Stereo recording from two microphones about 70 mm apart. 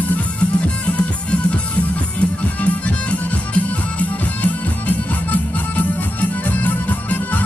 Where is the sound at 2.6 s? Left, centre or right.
Left.